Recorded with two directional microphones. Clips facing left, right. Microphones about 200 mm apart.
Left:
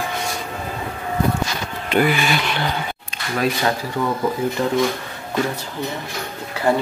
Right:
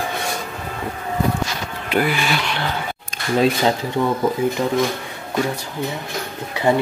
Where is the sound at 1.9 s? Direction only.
Centre (ahead or behind).